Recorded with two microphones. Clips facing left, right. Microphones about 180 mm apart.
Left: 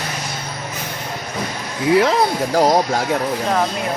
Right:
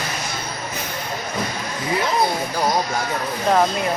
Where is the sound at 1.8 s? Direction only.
75° left (ahead or behind).